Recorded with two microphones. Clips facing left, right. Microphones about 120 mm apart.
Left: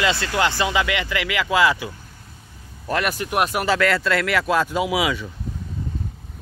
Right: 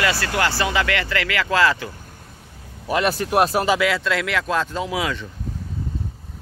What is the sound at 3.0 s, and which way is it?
Speech, 35° right (ahead or behind).